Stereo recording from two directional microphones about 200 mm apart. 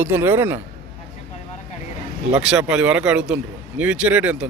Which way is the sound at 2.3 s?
5° right (ahead or behind).